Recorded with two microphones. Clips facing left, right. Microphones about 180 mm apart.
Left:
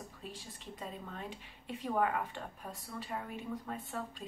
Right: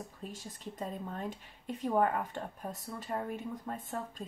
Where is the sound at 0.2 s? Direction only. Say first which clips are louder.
Right 4 dB; 45° right (ahead or behind).